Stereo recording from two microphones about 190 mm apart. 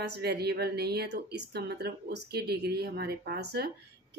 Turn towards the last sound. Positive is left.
turn(degrees=-60)  # may be behind; listen again after turning